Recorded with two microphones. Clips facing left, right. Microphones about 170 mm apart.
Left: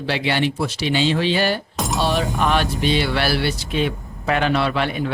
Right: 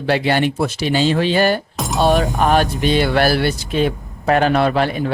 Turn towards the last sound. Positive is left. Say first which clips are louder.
# right 4 dB
turn(degrees=-40)  # may be behind; listen again after turning